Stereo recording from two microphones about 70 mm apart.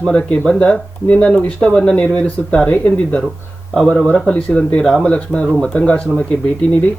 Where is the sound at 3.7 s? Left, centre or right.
Centre.